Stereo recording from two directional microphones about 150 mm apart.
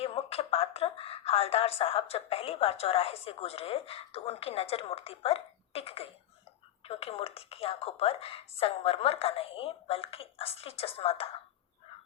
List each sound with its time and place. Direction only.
0.0 s a woman's voice: 40° left (ahead or behind)